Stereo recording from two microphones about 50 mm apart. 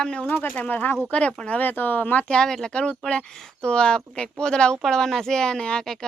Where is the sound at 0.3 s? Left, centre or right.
Left.